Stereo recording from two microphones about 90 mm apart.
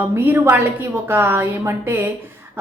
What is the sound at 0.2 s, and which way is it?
A woman's voice, 25° right (ahead or behind).